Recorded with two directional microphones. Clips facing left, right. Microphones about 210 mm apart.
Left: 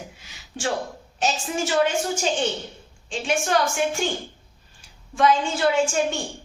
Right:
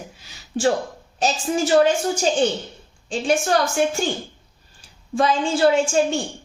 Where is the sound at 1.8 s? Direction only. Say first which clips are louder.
Right 4 dB; 40° right (ahead or behind).